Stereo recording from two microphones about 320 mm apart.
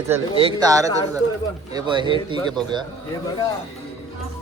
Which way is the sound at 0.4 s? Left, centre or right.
Centre.